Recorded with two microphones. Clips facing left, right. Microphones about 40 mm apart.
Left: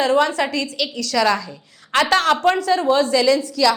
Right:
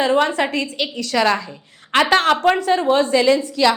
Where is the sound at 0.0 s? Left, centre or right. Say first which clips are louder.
Even; right.